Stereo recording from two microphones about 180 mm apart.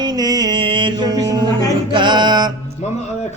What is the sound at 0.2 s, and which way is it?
Mantra, 20° right (ahead or behind).